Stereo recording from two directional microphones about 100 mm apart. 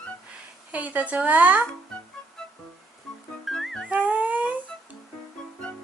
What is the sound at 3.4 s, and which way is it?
Music, centre (ahead or behind).